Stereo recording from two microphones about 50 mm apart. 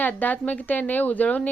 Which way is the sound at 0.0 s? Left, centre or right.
Left.